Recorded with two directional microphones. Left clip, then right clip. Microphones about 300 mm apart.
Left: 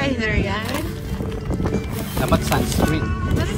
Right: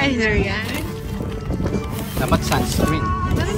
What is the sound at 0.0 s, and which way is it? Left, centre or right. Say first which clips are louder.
Speech: right 3 dB; centre.